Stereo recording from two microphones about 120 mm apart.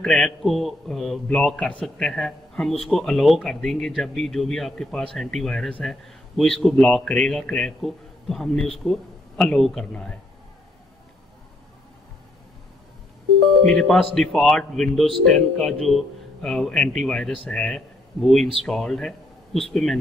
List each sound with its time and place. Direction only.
0.0 s a man's voice: 5° left (ahead or behind)
13.7 s a man's voice: centre (ahead or behind)